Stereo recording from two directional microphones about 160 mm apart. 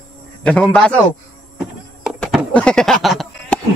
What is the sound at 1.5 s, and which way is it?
Sheep, 5° right (ahead or behind).